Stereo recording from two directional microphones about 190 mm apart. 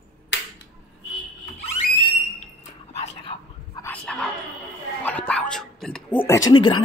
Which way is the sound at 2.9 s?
35° left (ahead or behind).